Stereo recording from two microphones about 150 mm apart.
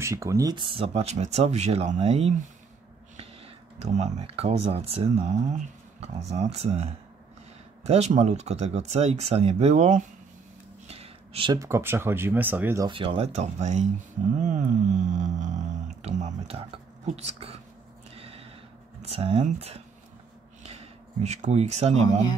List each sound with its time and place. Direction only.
0.0 s speech: 20° right (ahead or behind); by 2.3 s 40° right (ahead or behind)
3.8 s speech: 45° right (ahead or behind)
10.9 s a sound: 40° right (ahead or behind)
11.5 s speech: 20° right (ahead or behind)
12.8 s speech: 35° right (ahead or behind)
14.4 s a sound: 55° right (ahead or behind)
16.0 s speech: 50° right (ahead or behind)
18.1 s a sound: 40° right (ahead or behind)
19.0 s speech: 40° right (ahead or behind)